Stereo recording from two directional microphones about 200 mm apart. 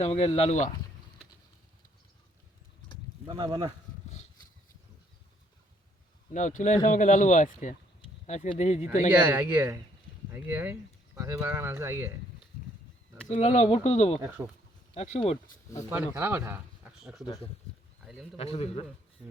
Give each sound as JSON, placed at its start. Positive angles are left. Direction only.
{"t": 0.0, "sound": "speech", "side_deg": 30}
{"t": 3.2, "sound": "speech", "side_deg": -20}
{"t": 6.3, "sound": "speech", "side_deg": 40}
{"t": 9.1, "sound": "speech", "side_deg": -10}
{"t": 13.2, "sound": "speech", "side_deg": 30}
{"t": 14.2, "sound": "speech", "side_deg": -5}
{"t": 14.9, "sound": "speech", "side_deg": 35}
{"t": 16.1, "sound": "speech", "side_deg": -10}
{"t": 17.2, "sound": "a man's voice", "side_deg": 25}
{"t": 18.0, "sound": "bird", "side_deg": 0}
{"t": 18.3, "sound": "a man's voice", "side_deg": 30}